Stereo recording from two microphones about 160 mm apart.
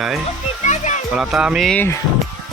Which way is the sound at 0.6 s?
45° left (ahead or behind).